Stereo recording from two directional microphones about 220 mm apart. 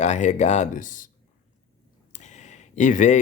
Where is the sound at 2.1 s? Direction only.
30° left (ahead or behind).